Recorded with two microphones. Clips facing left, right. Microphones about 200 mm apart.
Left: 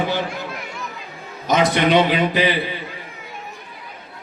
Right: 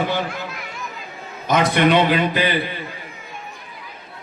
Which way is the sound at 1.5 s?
55° right (ahead or behind).